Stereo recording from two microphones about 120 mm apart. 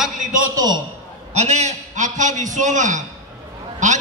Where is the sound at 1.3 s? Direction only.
70° right (ahead or behind).